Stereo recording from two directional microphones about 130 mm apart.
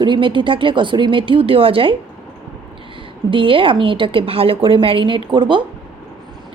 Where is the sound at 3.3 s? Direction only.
40° right (ahead or behind).